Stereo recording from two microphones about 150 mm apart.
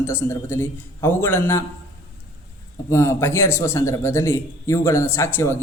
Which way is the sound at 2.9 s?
20° left (ahead or behind).